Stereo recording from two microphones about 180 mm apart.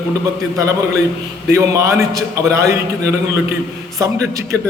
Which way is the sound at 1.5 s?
15° right (ahead or behind).